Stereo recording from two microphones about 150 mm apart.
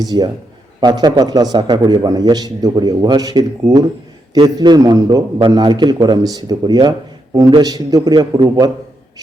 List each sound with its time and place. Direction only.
0.0 s a man's voice: 25° right (ahead or behind)